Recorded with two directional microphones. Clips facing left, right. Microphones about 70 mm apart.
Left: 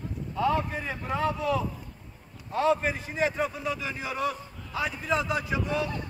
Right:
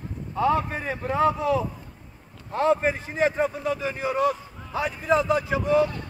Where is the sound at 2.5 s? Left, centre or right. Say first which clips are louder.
Right 3 dB; right.